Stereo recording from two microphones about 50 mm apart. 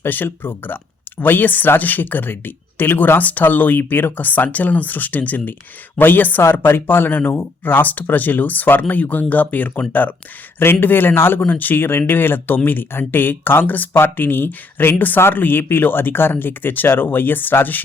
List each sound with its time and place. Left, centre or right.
0.0 s speech: left
11.4 s speech: left